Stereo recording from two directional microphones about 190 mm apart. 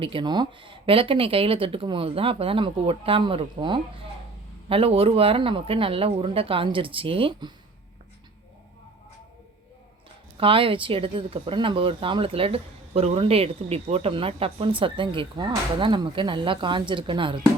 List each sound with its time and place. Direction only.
0.0 s speech: 25° right (ahead or behind)
10.3 s speech: 30° right (ahead or behind)